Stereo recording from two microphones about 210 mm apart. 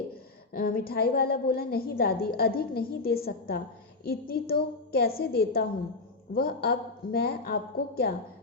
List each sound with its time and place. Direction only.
0.5 s a woman's voice: 45° left (ahead or behind)